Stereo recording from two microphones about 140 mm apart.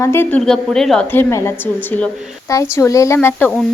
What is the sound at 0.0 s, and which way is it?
Speech, 15° left (ahead or behind).